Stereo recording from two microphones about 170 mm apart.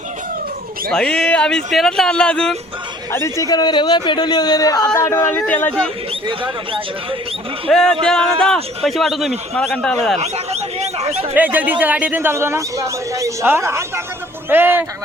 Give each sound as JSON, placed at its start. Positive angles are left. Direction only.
{"t": 0.9, "sound": "speech", "side_deg": 5}
{"t": 3.1, "sound": "a man's voice", "side_deg": 15}
{"t": 6.2, "sound": "speech", "side_deg": -30}
{"t": 7.7, "sound": "speech", "side_deg": 0}
{"t": 10.2, "sound": "a sound", "side_deg": -40}
{"t": 11.3, "sound": "speech", "side_deg": -10}